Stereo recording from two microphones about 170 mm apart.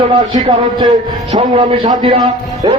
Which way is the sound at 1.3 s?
35° right (ahead or behind).